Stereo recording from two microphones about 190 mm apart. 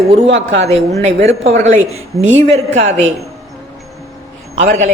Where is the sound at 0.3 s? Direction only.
80° right.